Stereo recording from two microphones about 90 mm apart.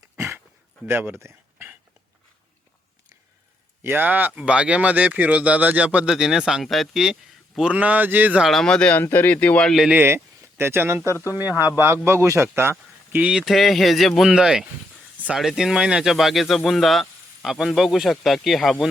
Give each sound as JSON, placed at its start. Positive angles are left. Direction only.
{"t": 0.2, "sound": "a sound", "side_deg": -30}
{"t": 0.9, "sound": "a man's voice", "side_deg": -20}
{"t": 1.2, "sound": "a sound", "side_deg": -25}
{"t": 3.8, "sound": "speech", "side_deg": -20}
{"t": 8.4, "sound": "speech", "side_deg": 0}
{"t": 9.0, "sound": "speech", "side_deg": 20}
{"t": 9.9, "sound": "a man's voice", "side_deg": -25}
{"t": 13.1, "sound": "speech", "side_deg": -15}
{"t": 13.4, "sound": "speech", "side_deg": 0}